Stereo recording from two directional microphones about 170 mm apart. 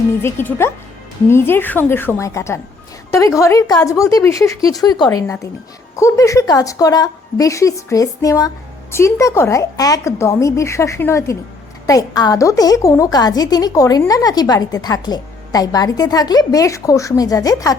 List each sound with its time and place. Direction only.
0.2 s a woman's voice: 15° left (ahead or behind)